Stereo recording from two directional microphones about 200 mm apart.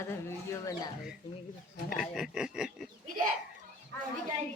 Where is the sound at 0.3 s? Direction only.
15° left (ahead or behind).